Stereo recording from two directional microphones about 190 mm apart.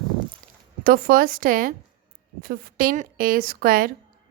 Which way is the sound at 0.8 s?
50° right (ahead or behind).